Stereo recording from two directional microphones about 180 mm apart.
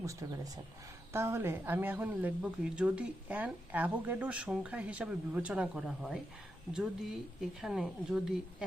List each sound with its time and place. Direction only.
0.0 s a woman's voice: 20° right (ahead or behind)